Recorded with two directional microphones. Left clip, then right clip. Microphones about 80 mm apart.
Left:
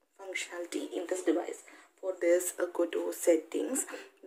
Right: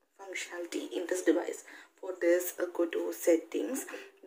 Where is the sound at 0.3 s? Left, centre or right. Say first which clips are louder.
Left 1 dB; centre.